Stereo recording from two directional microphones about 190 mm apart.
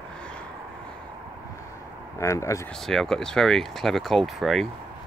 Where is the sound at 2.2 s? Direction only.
15° left (ahead or behind).